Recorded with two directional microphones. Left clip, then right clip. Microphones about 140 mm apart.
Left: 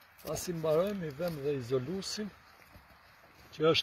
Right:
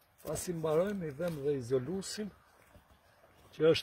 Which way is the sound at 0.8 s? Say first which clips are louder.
Left 2 dB; 10° left (ahead or behind).